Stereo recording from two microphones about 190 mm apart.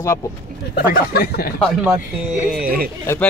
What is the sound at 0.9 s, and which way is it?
Speech, 50° left (ahead or behind).